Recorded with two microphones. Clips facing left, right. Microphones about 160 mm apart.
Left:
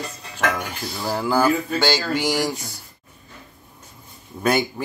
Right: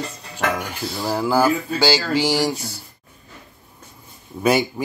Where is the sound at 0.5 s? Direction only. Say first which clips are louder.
Right 2 dB; 10° right (ahead or behind).